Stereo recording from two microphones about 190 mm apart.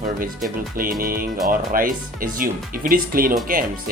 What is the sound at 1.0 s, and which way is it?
Speech, 50° right (ahead or behind).